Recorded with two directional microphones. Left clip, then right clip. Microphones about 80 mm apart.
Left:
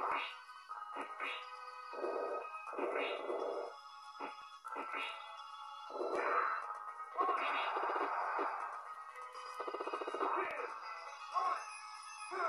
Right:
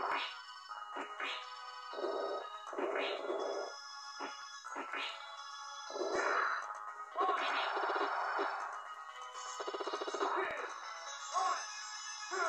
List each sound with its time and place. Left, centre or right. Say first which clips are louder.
0.0 s music: right 1 dB; right
2.0 s a sound: right 1 dB; right
4.7 s music: right 1 dB; right
6.2 s music: even; right